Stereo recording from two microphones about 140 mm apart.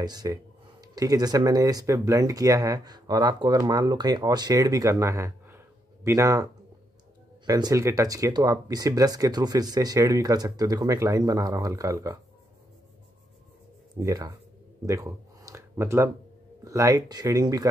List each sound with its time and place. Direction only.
0.0 s speech: 30° right (ahead or behind)
13.9 s speech: 25° right (ahead or behind)
14.9 s a sound: 20° right (ahead or behind)
16.6 s speech: 25° right (ahead or behind)